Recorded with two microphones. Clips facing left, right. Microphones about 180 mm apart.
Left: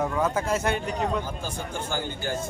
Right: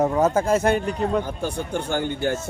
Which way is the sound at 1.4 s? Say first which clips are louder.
Right 6 dB; 65° right (ahead or behind).